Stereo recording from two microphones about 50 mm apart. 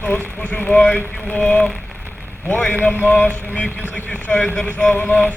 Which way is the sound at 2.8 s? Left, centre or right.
Left.